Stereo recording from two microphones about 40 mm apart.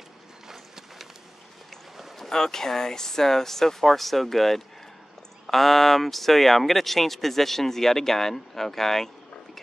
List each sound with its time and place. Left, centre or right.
0.5 s run: centre
2.1 s speech: centre